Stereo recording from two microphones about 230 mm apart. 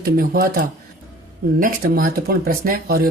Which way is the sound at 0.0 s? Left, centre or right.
Right.